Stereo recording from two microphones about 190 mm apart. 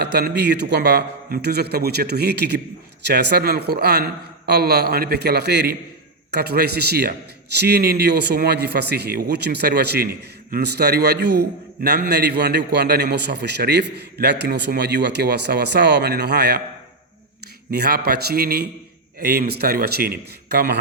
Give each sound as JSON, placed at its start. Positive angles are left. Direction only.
{"t": 0.0, "sound": "a man's voice", "side_deg": -60}
{"t": 17.7, "sound": "a man's voice", "side_deg": -55}